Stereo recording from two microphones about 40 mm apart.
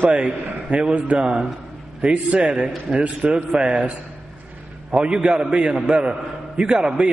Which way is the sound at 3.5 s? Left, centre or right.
Right.